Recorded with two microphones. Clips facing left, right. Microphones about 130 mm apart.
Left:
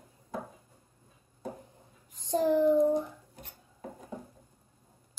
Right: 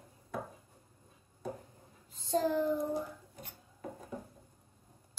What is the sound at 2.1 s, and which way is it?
Child singing, 15° left (ahead or behind).